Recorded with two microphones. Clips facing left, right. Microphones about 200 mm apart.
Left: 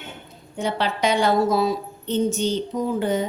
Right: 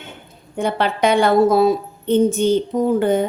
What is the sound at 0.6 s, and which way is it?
A woman's voice, 55° right (ahead or behind).